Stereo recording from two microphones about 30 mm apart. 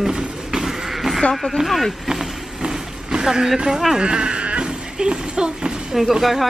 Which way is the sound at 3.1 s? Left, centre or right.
Right.